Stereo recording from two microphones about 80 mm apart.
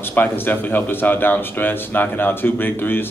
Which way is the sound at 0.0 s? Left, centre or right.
Left.